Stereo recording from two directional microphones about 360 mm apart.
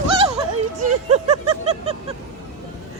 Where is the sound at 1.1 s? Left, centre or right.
Centre.